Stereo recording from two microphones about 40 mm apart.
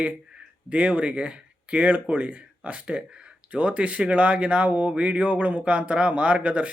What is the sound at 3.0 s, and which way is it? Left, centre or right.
Speech, right.